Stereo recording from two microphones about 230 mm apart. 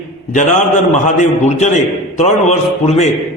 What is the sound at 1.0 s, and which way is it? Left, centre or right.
A man's voice, left.